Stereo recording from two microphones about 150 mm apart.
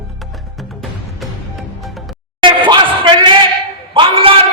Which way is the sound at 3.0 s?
35° right (ahead or behind).